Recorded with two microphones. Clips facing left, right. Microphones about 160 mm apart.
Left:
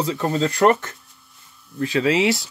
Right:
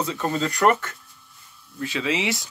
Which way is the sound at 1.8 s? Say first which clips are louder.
Left 7 dB; 40° left (ahead or behind).